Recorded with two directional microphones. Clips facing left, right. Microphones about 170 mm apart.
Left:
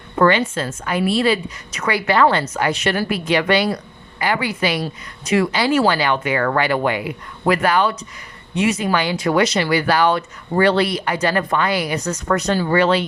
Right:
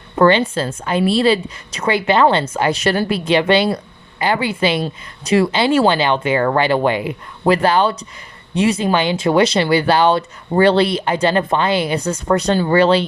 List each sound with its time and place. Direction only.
0.2 s speech: 30° right (ahead or behind)